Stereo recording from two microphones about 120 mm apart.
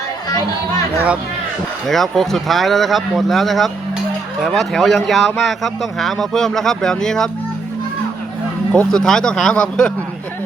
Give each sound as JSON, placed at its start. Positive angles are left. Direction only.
{"t": 0.3, "sound": "speech", "side_deg": 35}
{"t": 1.9, "sound": "a man's voice", "side_deg": 0}
{"t": 8.7, "sound": "a man's voice", "side_deg": 5}